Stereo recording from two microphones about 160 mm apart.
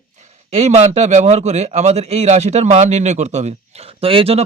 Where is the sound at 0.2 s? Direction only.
45° right (ahead or behind).